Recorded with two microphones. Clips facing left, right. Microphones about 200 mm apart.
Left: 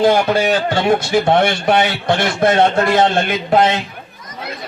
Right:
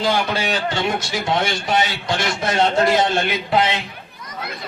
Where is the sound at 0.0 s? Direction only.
55° left (ahead or behind).